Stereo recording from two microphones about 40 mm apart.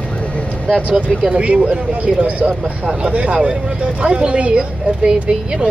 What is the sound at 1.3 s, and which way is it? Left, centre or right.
Speech, right.